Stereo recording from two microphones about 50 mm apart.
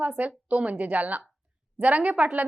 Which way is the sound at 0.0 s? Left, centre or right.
Right.